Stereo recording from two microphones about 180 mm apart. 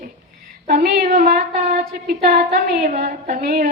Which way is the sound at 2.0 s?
55° right (ahead or behind).